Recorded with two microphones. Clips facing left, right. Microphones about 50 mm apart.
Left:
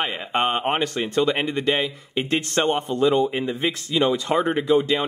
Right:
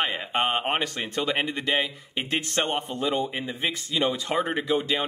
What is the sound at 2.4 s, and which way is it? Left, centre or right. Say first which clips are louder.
Speech: left 5 dB; left.